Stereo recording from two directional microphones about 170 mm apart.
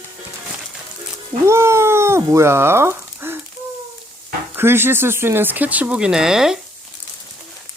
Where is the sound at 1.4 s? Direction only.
15° right (ahead or behind).